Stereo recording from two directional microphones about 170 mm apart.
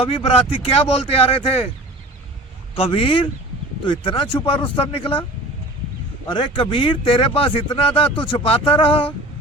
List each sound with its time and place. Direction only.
0.0 s speech: 35° left (ahead or behind)
2.7 s speech: 35° left (ahead or behind)
6.2 s speech: 30° left (ahead or behind)